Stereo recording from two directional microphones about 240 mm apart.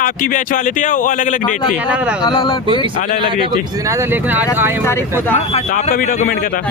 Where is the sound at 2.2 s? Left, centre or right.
Left.